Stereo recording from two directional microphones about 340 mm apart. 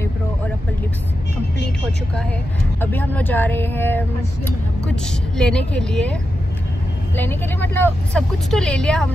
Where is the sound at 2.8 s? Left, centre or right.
Centre.